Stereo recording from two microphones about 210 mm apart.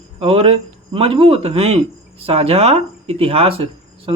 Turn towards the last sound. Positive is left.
turn(degrees=-25)  # may be behind; listen again after turning